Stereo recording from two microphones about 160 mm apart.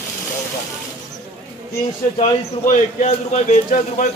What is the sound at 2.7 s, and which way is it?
A man's voice, 50° left (ahead or behind).